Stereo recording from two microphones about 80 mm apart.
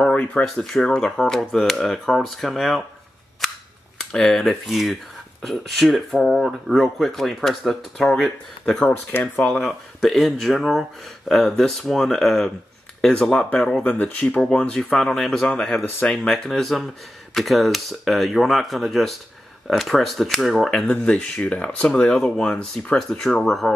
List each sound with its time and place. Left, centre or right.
0.0 s speech: centre
0.6 s speech: centre
4.0 s speech: centre
13.0 s speech: centre
13.8 s speech: left; by 20.9 s centre
20.9 s speech: centre